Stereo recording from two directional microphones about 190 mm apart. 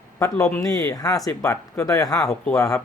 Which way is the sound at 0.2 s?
15° left (ahead or behind).